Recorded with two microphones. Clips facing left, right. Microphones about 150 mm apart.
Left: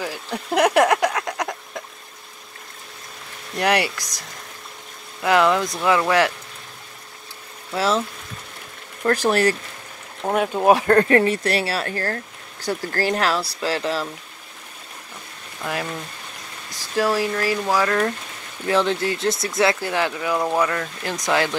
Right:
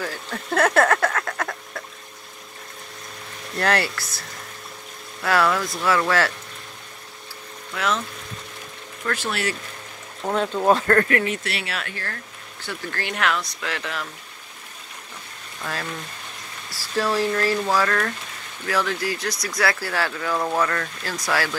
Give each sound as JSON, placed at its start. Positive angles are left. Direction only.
{"t": 0.0, "sound": "a sound", "side_deg": 10}
{"t": 3.5, "sound": "speech", "side_deg": 15}
{"t": 5.2, "sound": "speech", "side_deg": 20}
{"t": 7.7, "sound": "speech", "side_deg": 30}
{"t": 9.0, "sound": "speech", "side_deg": 40}
{"t": 10.2, "sound": "speech", "side_deg": 15}
{"t": 11.1, "sound": "speech", "side_deg": 35}
{"t": 15.6, "sound": "speech", "side_deg": 15}